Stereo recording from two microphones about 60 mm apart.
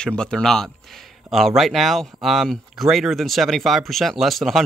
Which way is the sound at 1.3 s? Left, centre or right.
Centre.